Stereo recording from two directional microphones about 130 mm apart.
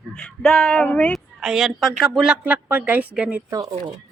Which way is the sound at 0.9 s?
10° left (ahead or behind).